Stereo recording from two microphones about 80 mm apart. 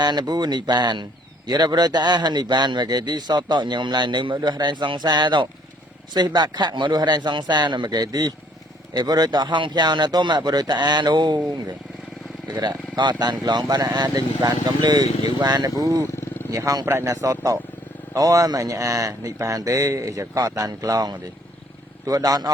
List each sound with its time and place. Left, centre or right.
0.0 s speech: right
4.4 s speech: right
12.5 s speech: right
16.8 s a man's voice: right